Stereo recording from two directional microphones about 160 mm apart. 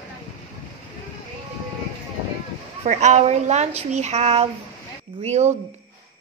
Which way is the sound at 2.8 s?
45° right (ahead or behind).